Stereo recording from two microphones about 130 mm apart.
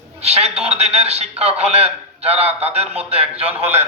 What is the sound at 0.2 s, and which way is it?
A man's voice, 55° right (ahead or behind).